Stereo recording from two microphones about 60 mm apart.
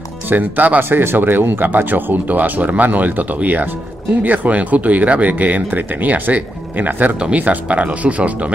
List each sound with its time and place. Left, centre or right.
0.3 s speech: right